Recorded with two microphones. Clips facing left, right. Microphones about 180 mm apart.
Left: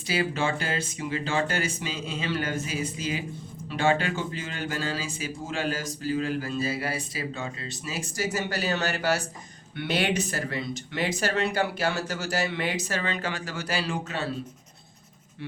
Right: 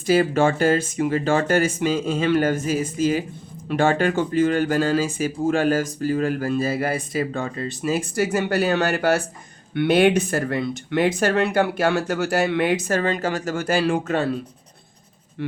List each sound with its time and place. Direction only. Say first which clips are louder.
0.1 s speech: right 9 dB; 50° right (ahead or behind)